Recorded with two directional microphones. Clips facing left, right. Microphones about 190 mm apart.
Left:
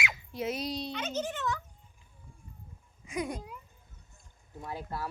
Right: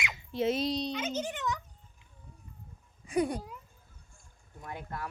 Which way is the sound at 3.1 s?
35° right (ahead or behind).